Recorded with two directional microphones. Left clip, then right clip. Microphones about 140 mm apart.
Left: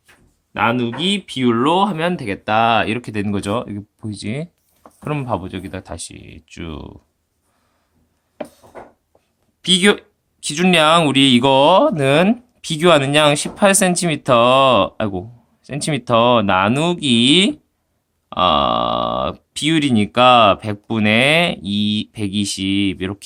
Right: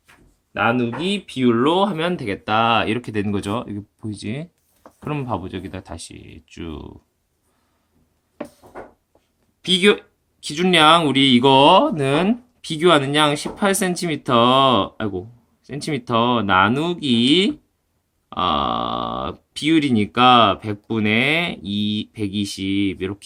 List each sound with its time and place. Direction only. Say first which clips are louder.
0.6 s speech: left 2 dB; 50° left (ahead or behind)
9.6 s speech: left 2 dB; 50° left (ahead or behind)